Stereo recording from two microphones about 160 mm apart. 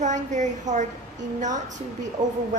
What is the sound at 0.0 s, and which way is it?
A woman's voice, 50° right (ahead or behind).